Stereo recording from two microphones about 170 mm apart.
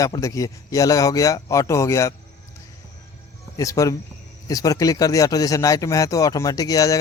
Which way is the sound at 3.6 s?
20° left (ahead or behind).